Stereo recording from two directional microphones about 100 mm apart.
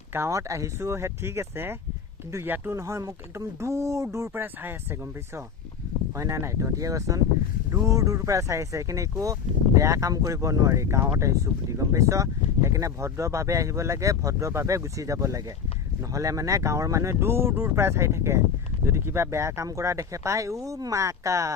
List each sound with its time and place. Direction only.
0.1 s speech: 30° right (ahead or behind)
6.1 s speech: 30° right (ahead or behind)